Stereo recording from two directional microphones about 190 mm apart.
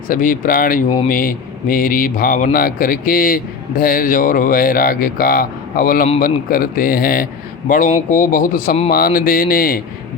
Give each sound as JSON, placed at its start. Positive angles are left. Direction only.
{"t": 0.1, "sound": "speech", "side_deg": 45}